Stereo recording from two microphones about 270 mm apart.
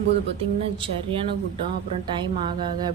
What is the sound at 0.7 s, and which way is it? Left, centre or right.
A woman's voice, centre.